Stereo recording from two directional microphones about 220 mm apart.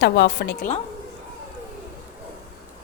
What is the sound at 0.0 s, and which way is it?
Speech, 50° left (ahead or behind).